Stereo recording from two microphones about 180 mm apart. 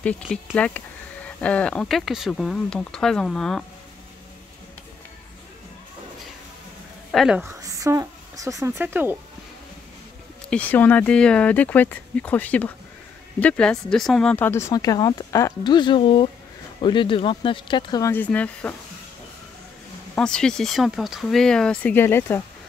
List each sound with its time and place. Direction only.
0.0 s speech: 5° left (ahead or behind)
7.1 s speech: centre (ahead or behind)
7.4 s a woman's voice: 15° right (ahead or behind)
10.5 s speech: 10° left (ahead or behind); by 18.1 s 25° left (ahead or behind)
18.1 s speech: 10° left (ahead or behind)
20.2 s speech: 5° left (ahead or behind)